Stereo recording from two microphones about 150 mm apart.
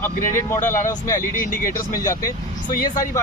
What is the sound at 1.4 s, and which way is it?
Speech, 65° left (ahead or behind).